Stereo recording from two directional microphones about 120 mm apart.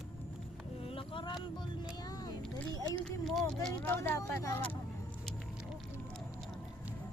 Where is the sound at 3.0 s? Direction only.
5° left (ahead or behind).